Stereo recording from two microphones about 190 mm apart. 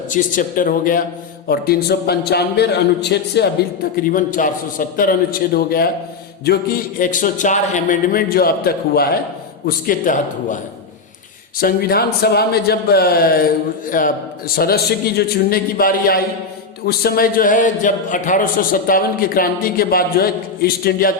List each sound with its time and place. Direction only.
0.1 s a man's voice: 45° left (ahead or behind); by 3.5 s 60° left (ahead or behind)
3.9 s a man's voice: 45° left (ahead or behind)
11.6 s a man's voice: 50° left (ahead or behind)